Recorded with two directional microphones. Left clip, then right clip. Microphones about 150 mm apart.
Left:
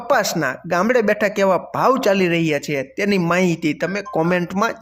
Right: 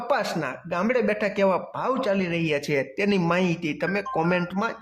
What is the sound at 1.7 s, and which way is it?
Speech, 40° left (ahead or behind).